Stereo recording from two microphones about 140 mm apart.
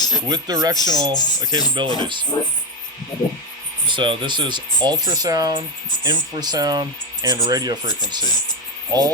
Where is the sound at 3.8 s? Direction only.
35° right (ahead or behind).